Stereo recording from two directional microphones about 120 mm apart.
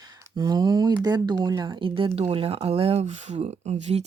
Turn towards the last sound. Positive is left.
turn(degrees=-65)  # may be behind; listen again after turning